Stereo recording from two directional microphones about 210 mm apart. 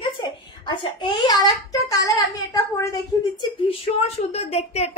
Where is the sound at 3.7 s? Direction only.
30° left (ahead or behind).